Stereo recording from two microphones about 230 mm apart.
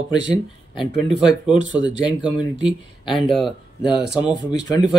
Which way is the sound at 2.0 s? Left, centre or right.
Centre.